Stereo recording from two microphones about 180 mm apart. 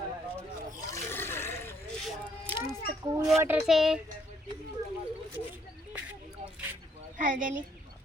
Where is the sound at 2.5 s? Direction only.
15° right (ahead or behind).